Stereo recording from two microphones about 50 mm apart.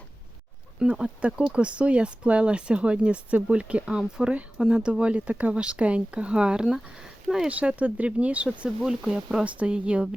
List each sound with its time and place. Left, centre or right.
0.8 s speech: centre